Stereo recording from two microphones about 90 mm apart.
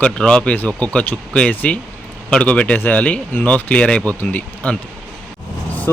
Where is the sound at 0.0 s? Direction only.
10° left (ahead or behind).